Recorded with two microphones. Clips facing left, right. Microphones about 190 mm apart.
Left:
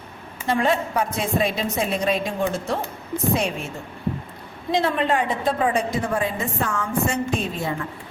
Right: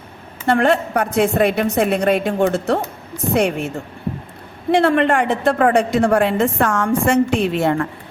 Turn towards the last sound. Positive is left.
turn(degrees=-75)  # may be behind; listen again after turning